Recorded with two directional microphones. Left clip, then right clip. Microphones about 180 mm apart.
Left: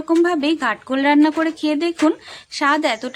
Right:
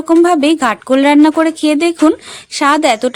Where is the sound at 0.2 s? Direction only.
40° right (ahead or behind).